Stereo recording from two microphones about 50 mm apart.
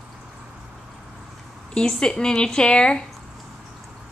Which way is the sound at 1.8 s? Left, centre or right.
Centre.